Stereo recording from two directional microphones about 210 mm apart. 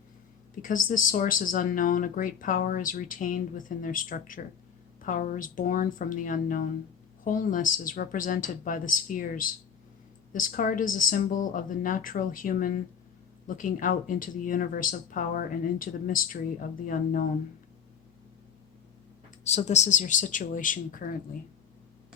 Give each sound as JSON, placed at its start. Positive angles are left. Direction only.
{"t": 0.6, "sound": "speech", "side_deg": 40}
{"t": 19.5, "sound": "speech", "side_deg": 30}